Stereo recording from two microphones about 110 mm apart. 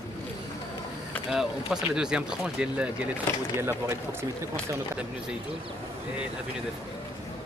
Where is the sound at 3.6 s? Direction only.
25° right (ahead or behind).